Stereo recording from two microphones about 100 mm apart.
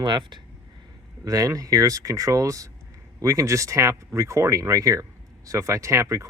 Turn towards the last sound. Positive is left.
turn(degrees=-30)  # may be behind; listen again after turning